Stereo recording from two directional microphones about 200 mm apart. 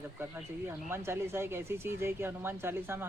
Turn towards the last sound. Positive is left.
turn(degrees=-10)  # may be behind; listen again after turning